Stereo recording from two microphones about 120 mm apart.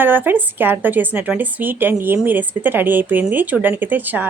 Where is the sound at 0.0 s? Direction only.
15° right (ahead or behind).